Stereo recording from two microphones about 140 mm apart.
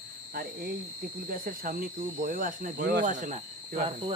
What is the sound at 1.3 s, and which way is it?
Speech, 90° right.